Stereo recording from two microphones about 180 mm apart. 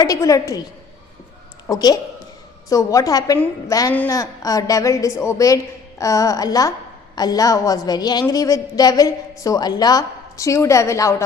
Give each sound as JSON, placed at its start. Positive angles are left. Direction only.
{"t": 0.0, "sound": "a woman's voice", "side_deg": 20}
{"t": 1.6, "sound": "a woman's voice", "side_deg": 20}
{"t": 3.3, "sound": "a woman's voice", "side_deg": 10}